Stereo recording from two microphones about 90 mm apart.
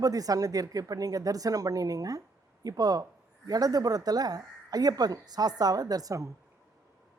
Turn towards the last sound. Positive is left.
turn(degrees=-40)  # may be behind; listen again after turning